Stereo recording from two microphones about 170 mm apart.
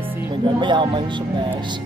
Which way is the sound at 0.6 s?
25° right (ahead or behind).